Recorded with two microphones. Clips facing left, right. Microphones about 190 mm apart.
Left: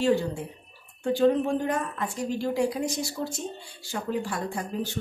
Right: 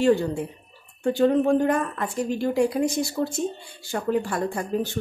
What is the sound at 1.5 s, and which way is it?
A woman's voice, 55° right (ahead or behind).